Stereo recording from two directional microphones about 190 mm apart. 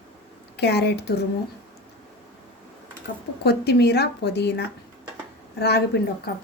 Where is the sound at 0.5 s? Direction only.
60° left (ahead or behind).